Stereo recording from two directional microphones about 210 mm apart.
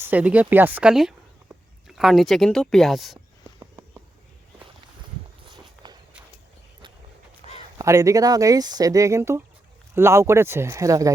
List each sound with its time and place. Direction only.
0.0 s speech: 5° right (ahead or behind)
5.5 s walk: 20° right (ahead or behind)
7.4 s a sound: 25° right (ahead or behind)
7.8 s speech: 15° right (ahead or behind)